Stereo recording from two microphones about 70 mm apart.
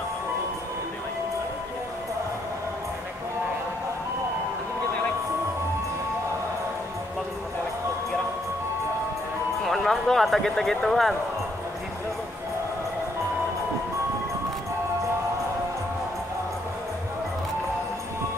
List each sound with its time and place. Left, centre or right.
9.6 s speech: centre